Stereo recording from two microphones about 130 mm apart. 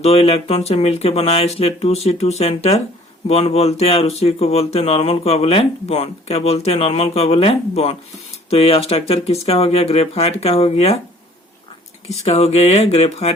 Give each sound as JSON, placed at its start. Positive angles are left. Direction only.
{"t": 0.0, "sound": "speech", "side_deg": 50}
{"t": 12.0, "sound": "speech", "side_deg": 55}